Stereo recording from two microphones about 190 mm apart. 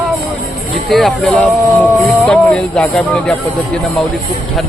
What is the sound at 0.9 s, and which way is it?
Speech, centre (ahead or behind).